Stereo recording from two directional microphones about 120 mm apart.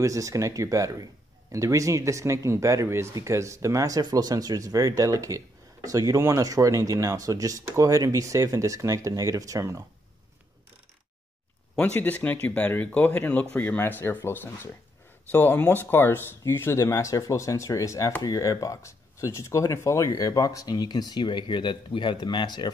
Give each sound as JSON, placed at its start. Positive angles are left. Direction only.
{"t": 0.0, "sound": "speech", "side_deg": -25}
{"t": 11.7, "sound": "speech", "side_deg": 15}